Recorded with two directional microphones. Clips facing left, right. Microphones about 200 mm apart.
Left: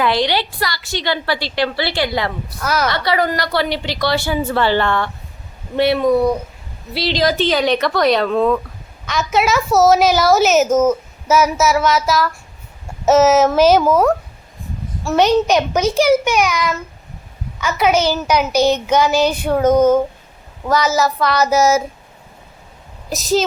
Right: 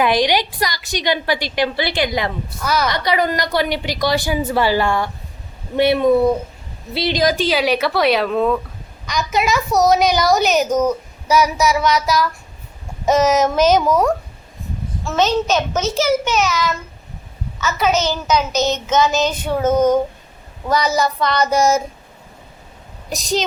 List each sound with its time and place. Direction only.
0.0 s a woman's voice: 15° right (ahead or behind)
2.6 s a child's voice: 5° left (ahead or behind)
2.9 s a woman's voice: 20° right (ahead or behind); by 14.1 s centre (ahead or behind)
15.0 s a child's voice: 15° left (ahead or behind)
23.0 s a woman's voice: centre (ahead or behind)